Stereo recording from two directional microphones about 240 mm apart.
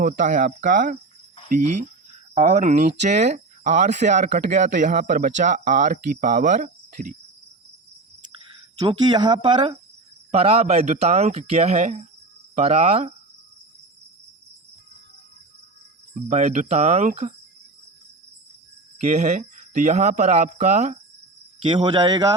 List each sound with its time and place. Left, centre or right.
0.0 s speech: right
6.1 s cricket: right
8.8 s speech: centre
16.3 s speech: right
18.9 s speech: right